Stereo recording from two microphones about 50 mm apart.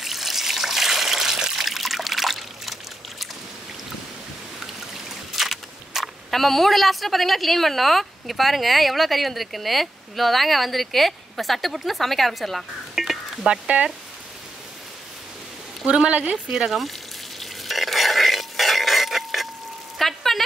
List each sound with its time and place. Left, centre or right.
0.0 s water: centre
5.3 s a sound: centre
6.3 s a woman's voice: centre
13.0 s whispering: centre
13.5 s speech: right
15.9 s speech: right
16.4 s a woman's voice: centre
17.4 s a sound: centre